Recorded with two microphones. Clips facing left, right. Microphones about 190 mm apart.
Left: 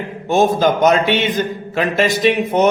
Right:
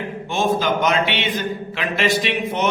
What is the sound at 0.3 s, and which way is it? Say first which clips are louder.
A man's voice: left 6 dB; 45° left (ahead or behind).